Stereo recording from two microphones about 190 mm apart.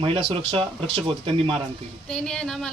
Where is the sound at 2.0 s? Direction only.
5° left (ahead or behind).